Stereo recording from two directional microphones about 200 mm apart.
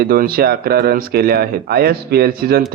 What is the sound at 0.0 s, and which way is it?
A man's voice, 50° right (ahead or behind).